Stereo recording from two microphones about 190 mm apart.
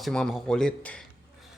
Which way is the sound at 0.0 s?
Centre (ahead or behind).